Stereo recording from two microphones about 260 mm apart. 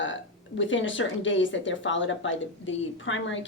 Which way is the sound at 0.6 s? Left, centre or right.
Left.